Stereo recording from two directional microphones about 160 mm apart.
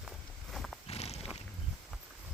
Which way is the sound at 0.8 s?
40° left (ahead or behind).